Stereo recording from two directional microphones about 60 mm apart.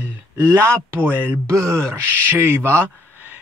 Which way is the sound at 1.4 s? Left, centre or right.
Right.